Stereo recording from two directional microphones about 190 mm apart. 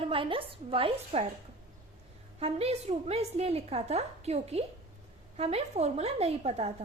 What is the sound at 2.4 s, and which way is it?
A woman's voice, 30° right (ahead or behind).